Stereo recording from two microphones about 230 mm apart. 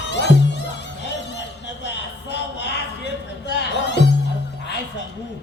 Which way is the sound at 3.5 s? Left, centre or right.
Left.